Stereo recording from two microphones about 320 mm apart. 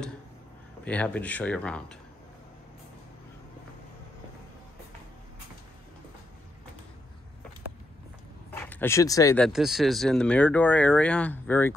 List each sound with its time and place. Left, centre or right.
0.8 s speech: centre
8.5 s speech: centre